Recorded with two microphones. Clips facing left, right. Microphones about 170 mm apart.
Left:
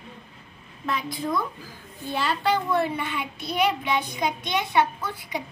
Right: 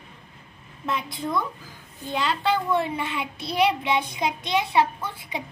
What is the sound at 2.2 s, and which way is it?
A child's voice, 25° right (ahead or behind).